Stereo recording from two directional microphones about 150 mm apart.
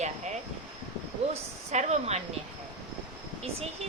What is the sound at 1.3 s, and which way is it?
Speech, 50° right (ahead or behind).